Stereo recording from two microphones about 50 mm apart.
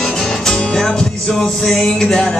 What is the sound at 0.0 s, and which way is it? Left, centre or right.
Music, centre.